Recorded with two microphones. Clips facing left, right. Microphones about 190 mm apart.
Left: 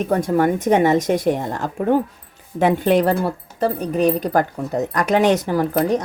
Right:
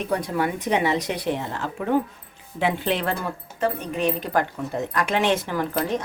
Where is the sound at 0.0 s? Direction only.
45° left (ahead or behind).